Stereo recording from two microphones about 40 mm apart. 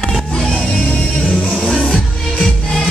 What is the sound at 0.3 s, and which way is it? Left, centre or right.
Music, centre.